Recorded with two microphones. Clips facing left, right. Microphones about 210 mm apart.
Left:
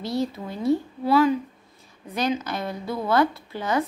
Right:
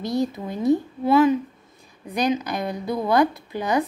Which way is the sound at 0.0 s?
15° right (ahead or behind).